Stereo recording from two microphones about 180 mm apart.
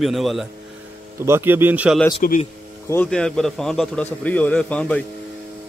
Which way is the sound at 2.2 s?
50° left (ahead or behind).